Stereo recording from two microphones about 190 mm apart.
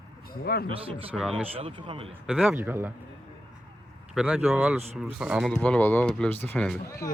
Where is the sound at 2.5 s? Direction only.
10° right (ahead or behind).